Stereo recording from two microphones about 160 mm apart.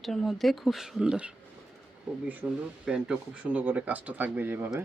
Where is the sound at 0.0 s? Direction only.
Centre (ahead or behind).